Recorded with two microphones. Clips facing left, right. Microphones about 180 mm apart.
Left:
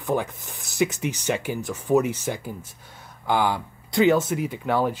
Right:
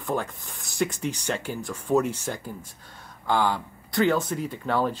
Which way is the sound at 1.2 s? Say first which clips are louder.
Left 4 dB; 15° left (ahead or behind).